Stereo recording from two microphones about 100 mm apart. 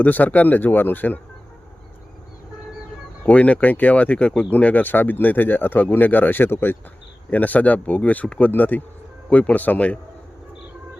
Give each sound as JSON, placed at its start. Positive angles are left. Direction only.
{"t": 0.0, "sound": "speech", "side_deg": 15}
{"t": 3.2, "sound": "speech", "side_deg": 15}